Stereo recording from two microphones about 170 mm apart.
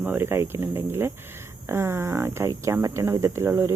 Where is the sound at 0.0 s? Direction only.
10° right (ahead or behind).